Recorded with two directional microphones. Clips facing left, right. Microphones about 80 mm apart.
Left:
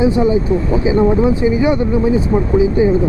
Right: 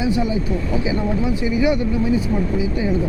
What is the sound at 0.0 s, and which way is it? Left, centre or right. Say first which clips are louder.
Speech: left 7 dB; left.